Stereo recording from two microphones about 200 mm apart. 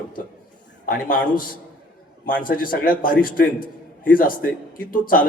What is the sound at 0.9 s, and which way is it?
A man's voice, 45° left (ahead or behind).